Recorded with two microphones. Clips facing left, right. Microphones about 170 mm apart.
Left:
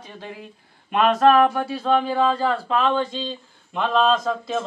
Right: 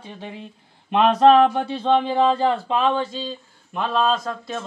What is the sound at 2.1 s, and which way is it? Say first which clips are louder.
A man's voice: right 2 dB; 20° right (ahead or behind).